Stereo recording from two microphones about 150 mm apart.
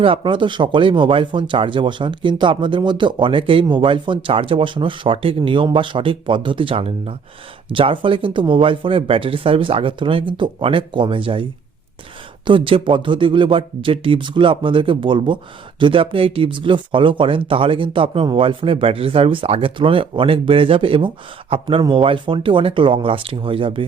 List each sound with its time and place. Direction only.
0.0 s speech: 35° right (ahead or behind)
12.5 s speech: 35° right (ahead or behind)